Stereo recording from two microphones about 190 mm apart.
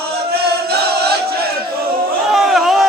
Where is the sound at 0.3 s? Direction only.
55° right (ahead or behind).